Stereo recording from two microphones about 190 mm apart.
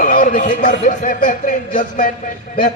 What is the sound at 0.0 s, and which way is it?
A man's voice, 45° left (ahead or behind).